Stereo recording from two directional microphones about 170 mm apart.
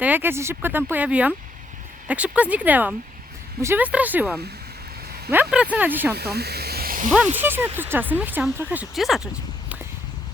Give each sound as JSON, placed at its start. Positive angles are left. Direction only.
{"t": 0.0, "sound": "speech", "side_deg": -10}
{"t": 6.1, "sound": "speech", "side_deg": -70}
{"t": 7.3, "sound": "speech", "side_deg": -10}